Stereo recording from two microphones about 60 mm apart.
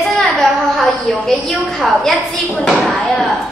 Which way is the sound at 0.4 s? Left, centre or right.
Centre.